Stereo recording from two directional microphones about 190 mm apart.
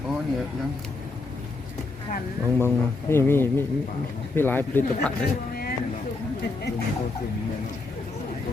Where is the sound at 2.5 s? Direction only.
10° left (ahead or behind).